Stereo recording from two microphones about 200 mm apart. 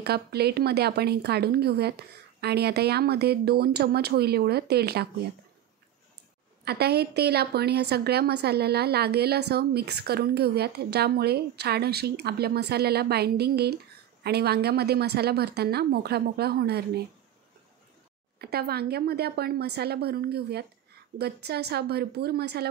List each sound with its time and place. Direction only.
0.0 s a woman's voice: 55° right (ahead or behind)
6.6 s a woman's voice: 55° right (ahead or behind)
18.4 s a woman's voice: 50° right (ahead or behind)